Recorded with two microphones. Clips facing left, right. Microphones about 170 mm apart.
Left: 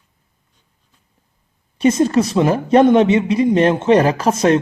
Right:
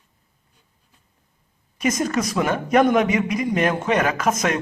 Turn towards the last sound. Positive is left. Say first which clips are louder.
# left 7 dB
turn(degrees=30)  # may be behind; listen again after turning